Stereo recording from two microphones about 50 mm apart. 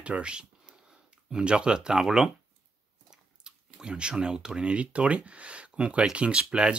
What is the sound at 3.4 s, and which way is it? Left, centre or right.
Speech, centre.